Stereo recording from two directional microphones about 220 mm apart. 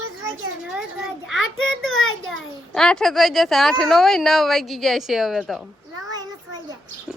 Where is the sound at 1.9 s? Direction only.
65° left (ahead or behind).